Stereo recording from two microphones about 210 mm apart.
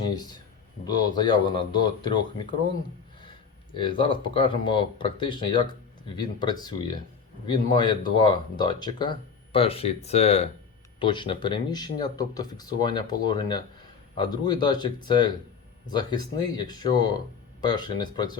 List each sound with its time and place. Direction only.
0.9 s speech: 20° left (ahead or behind)
3.8 s speech: 25° left (ahead or behind)